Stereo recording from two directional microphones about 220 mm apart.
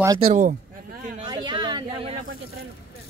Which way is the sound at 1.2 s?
20° right (ahead or behind).